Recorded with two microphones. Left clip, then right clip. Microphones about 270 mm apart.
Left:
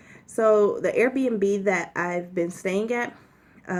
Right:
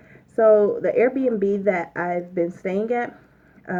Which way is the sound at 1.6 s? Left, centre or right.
Left.